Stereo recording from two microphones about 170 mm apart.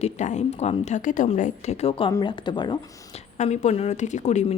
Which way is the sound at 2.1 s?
25° left (ahead or behind).